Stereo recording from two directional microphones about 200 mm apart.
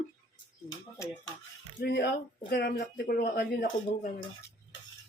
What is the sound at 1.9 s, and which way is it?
Speech, 55° left (ahead or behind).